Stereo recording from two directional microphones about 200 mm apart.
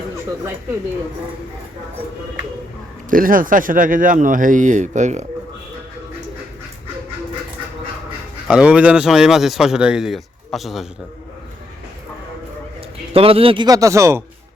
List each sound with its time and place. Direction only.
3.1 s speech: 45° right (ahead or behind)
8.4 s a man's voice: 5° right (ahead or behind)
13.1 s a man's voice: 30° right (ahead or behind)